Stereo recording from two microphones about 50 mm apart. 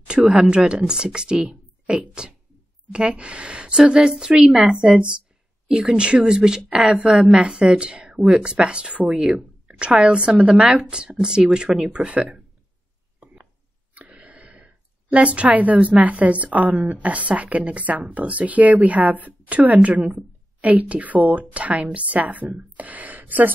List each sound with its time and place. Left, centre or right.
0.0 s a woman's voice: right
13.2 s chopping: right
13.9 s a sound: right
16.9 s speech: right